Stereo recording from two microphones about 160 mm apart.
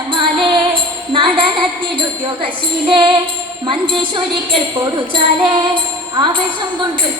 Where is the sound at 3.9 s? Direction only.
30° right (ahead or behind).